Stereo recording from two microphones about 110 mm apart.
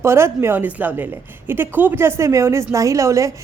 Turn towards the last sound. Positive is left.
turn(degrees=-30)  # may be behind; listen again after turning